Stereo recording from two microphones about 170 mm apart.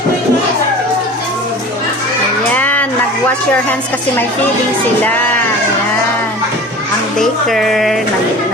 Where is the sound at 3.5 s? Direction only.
10° left (ahead or behind).